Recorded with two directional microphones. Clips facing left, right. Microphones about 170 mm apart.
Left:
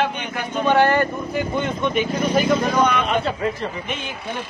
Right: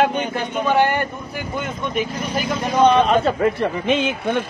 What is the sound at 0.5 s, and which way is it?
Speech, 10° right (ahead or behind).